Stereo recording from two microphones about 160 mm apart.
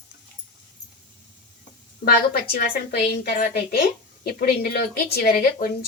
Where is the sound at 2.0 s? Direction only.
65° left (ahead or behind).